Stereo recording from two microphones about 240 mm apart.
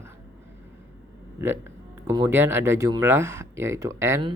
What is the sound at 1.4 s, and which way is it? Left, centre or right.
Speech, centre.